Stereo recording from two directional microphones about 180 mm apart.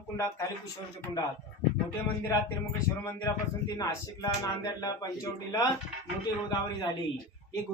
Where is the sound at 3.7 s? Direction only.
20° left (ahead or behind).